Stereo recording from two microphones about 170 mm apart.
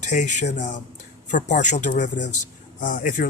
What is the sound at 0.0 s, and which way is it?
Speech, 45° left (ahead or behind).